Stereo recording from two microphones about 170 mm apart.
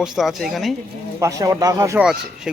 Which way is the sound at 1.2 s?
20° right (ahead or behind).